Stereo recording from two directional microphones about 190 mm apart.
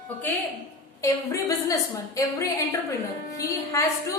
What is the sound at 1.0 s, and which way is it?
A woman's voice, 15° left (ahead or behind).